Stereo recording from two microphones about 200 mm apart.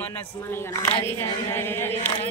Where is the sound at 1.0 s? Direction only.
10° left (ahead or behind).